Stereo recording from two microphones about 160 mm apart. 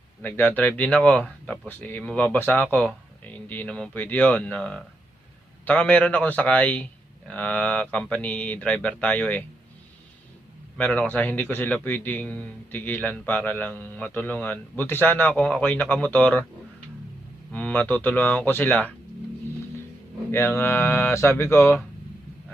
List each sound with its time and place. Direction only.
0.2 s a man's voice: 10° left (ahead or behind)
10.8 s a man's voice: 10° left (ahead or behind)
17.5 s a man's voice: 10° left (ahead or behind)
20.3 s a man's voice: 15° left (ahead or behind)